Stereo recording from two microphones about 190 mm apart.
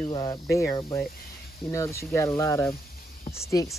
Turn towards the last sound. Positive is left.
turn(degrees=15)  # may be behind; listen again after turning